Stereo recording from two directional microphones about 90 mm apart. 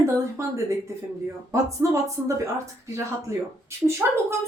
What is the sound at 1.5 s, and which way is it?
A woman's voice, 35° right (ahead or behind).